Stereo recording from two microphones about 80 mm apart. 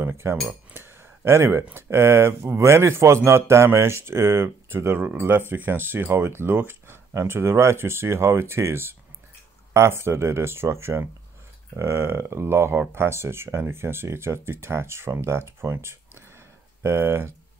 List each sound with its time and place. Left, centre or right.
0.0 s cutlery: right
5.0 s speech: right
7.2 s cutlery: right
15.7 s a sound: right
16.8 s cutlery: right